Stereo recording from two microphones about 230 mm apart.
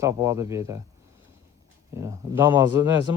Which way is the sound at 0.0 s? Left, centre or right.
Centre.